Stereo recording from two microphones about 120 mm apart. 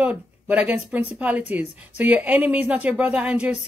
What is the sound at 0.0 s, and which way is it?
Speech, 15° right (ahead or behind).